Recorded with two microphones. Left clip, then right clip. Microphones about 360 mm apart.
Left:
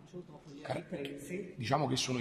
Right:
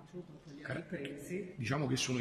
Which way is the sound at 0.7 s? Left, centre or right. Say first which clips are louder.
Left 3 dB; centre.